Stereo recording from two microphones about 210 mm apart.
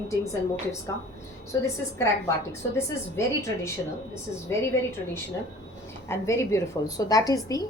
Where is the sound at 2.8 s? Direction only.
10° left (ahead or behind).